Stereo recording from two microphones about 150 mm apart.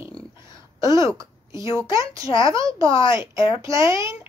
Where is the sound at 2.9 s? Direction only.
35° left (ahead or behind).